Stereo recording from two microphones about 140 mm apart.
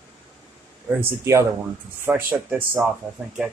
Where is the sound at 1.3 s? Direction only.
20° right (ahead or behind).